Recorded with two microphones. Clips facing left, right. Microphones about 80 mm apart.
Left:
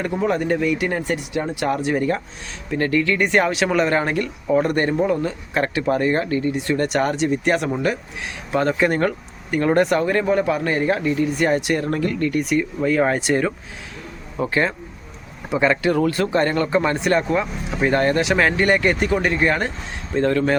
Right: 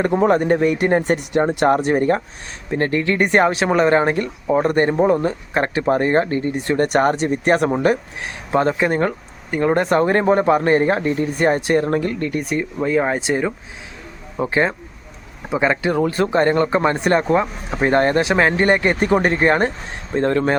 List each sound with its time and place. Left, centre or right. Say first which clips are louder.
0.0 s speech: right 5 dB; right